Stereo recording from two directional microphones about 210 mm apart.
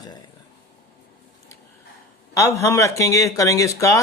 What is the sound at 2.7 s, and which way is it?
Speech, 15° left (ahead or behind).